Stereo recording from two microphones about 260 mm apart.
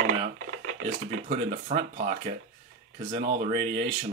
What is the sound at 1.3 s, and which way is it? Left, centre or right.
Speech, right.